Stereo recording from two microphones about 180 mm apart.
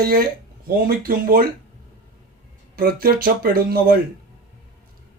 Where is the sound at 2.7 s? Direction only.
55° right (ahead or behind).